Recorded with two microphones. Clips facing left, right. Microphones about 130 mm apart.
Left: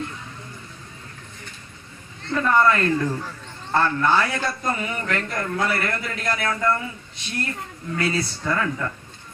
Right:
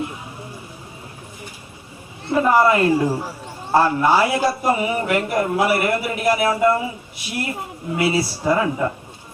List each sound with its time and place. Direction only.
2.2 s a man's voice: 15° right (ahead or behind)
3.1 s speech: 35° right (ahead or behind)
3.4 s a man's voice: 10° right (ahead or behind)
6.5 s speech: 25° right (ahead or behind)
8.4 s speech: 20° right (ahead or behind)